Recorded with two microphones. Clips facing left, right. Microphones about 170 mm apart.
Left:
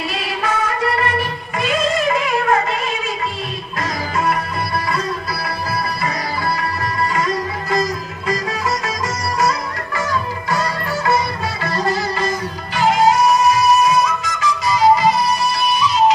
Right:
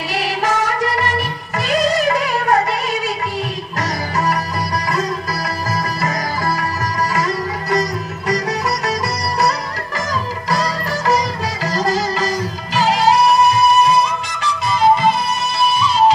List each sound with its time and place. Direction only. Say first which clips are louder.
0.1 s music: right 7 dB; 85° right
1.8 s music: right 3 dB; 75° right (ahead or behind)
7.2 s sitar: right 1 dB; 75° right (ahead or behind)
12.7 s music: even; 85° right; by 13.9 s 60° right (ahead or behind)
13.9 s music: even; 30° right (ahead or behind)